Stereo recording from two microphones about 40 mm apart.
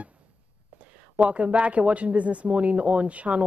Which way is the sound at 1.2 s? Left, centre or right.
Right.